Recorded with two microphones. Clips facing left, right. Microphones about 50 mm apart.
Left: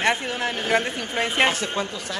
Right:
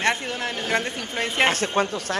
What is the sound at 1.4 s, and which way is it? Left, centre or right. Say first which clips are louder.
Speech: right 2 dB; right.